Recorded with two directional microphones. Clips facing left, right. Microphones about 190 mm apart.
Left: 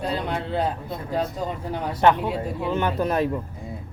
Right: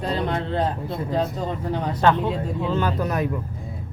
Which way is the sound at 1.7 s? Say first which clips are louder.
Left 1 dB; 10° left (ahead or behind).